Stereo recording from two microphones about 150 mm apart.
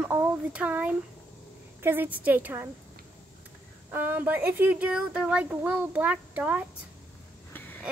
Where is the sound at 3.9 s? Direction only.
15° right (ahead or behind).